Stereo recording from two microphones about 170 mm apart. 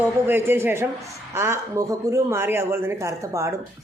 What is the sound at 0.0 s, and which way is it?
Speech, 15° right (ahead or behind).